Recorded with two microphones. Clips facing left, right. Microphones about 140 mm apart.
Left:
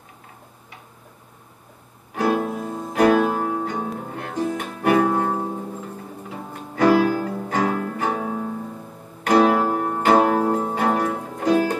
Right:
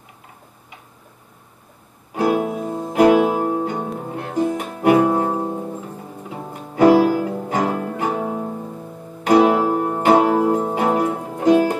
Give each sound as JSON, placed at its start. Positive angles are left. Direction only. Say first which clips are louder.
{"t": 2.1, "sound": "music", "louder": "right 3 dB", "side_deg": -10}
{"t": 4.2, "sound": "music", "louder": "right 5 dB", "side_deg": -25}
{"t": 4.6, "sound": "music", "louder": "right 3 dB", "side_deg": -15}
{"t": 6.7, "sound": "music", "louder": "right 4 dB", "side_deg": -15}